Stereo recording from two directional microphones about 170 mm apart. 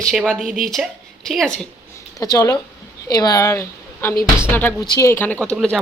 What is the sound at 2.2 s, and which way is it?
A woman's voice, 20° left (ahead or behind).